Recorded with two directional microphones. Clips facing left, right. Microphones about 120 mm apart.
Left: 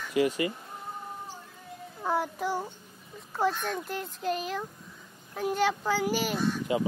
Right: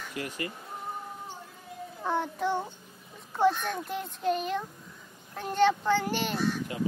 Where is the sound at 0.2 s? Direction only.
90° left.